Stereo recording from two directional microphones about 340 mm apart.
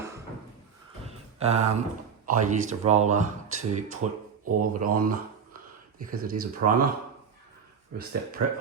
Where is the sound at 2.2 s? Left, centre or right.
Right.